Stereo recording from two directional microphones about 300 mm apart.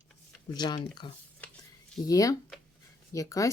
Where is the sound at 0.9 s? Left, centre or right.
Centre.